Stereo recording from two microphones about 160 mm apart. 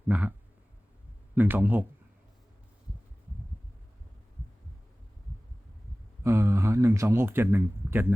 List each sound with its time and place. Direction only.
0.1 s a man's voice: 10° right (ahead or behind)
1.4 s a man's voice: 10° right (ahead or behind)
6.2 s speech: 15° right (ahead or behind)